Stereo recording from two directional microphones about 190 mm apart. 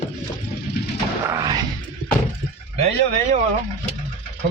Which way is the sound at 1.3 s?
20° right (ahead or behind).